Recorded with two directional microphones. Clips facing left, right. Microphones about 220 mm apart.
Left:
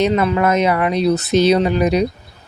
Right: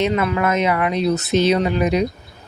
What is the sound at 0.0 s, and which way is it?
Speech, 35° left (ahead or behind).